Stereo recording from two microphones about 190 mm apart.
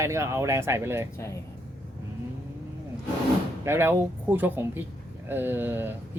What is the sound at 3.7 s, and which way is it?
Speech, 10° right (ahead or behind).